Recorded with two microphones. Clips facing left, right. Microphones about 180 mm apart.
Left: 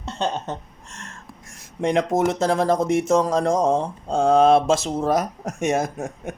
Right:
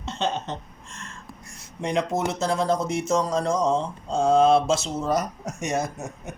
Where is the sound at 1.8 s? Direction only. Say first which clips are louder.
Left 5 dB; 55° left (ahead or behind).